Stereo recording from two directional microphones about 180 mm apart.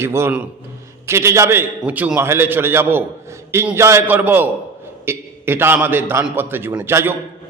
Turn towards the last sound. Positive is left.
turn(degrees=-10)  # may be behind; listen again after turning